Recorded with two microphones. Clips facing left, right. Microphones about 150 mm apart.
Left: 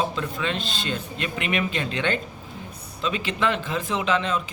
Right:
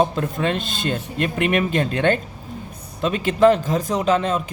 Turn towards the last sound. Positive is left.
turn(degrees=-45)  # may be behind; listen again after turning